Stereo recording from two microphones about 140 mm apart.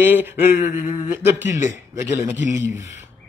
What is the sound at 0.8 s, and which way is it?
Speech, 60° left (ahead or behind).